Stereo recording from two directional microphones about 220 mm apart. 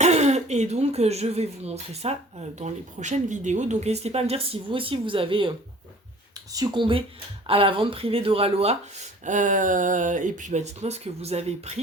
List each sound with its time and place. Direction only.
0.0 s speech: 30° right (ahead or behind)